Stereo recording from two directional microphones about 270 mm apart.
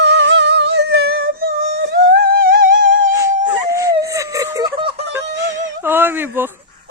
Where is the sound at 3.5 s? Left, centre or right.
Centre.